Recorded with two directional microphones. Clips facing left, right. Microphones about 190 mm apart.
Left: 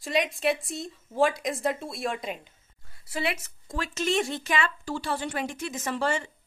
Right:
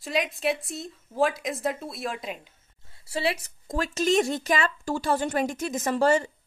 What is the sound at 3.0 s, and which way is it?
Speech, 30° right (ahead or behind).